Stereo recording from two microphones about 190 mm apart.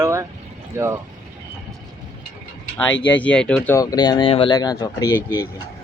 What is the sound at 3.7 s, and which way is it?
Speech, 20° left (ahead or behind).